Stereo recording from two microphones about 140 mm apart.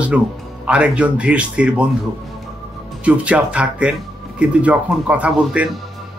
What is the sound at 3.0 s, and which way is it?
Speech, 10° right (ahead or behind).